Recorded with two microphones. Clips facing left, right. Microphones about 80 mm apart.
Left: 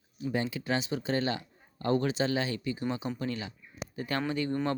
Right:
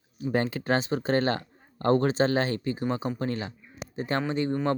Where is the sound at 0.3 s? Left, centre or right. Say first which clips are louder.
Right 5 dB; right.